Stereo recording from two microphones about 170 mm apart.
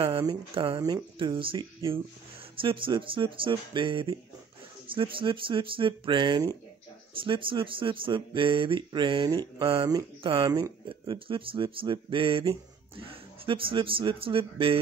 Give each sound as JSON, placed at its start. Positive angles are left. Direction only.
{"t": 0.2, "sound": "speech", "side_deg": -25}